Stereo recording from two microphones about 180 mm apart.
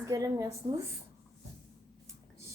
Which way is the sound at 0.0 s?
20° right (ahead or behind).